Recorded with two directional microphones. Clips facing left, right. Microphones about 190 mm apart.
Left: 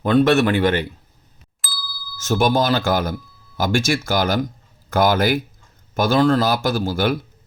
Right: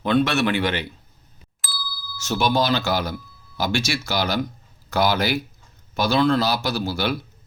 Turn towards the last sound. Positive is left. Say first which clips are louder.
# left 4 dB
turn(degrees=50)  # may be behind; listen again after turning